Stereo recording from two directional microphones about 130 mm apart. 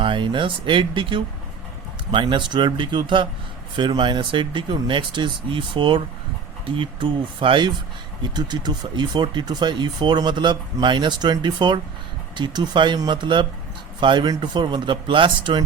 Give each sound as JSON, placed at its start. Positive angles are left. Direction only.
{"t": 0.0, "sound": "speech", "side_deg": -40}